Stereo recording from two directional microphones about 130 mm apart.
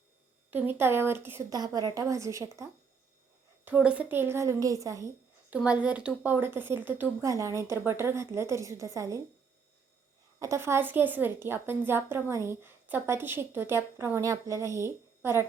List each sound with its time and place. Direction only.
0.5 s a woman's voice: 15° right (ahead or behind)
1.5 s a woman's voice: 30° right (ahead or behind)
3.6 s a woman's voice: 10° right (ahead or behind)
5.5 s a woman's voice: 10° right (ahead or behind)
7.3 s a woman's voice: 25° right (ahead or behind)
10.4 s a woman's voice: 20° right (ahead or behind)